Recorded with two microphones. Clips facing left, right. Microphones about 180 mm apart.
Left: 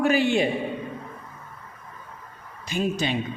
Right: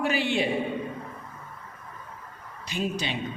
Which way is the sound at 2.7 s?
45° left (ahead or behind).